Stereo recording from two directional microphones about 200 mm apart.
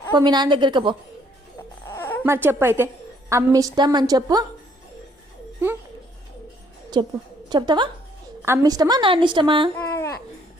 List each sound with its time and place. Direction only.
0.1 s a woman's voice: 20° right (ahead or behind)
1.9 s a sound: 10° left (ahead or behind)
2.2 s a woman's voice: 10° right (ahead or behind)
6.9 s a woman's voice: 20° right (ahead or behind)
8.4 s a woman's voice: 10° right (ahead or behind)
9.7 s babbling: 10° left (ahead or behind)